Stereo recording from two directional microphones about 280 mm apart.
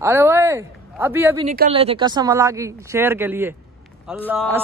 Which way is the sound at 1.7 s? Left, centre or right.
Centre.